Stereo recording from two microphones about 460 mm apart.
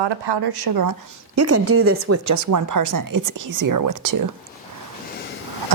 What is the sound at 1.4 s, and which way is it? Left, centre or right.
Speech, right.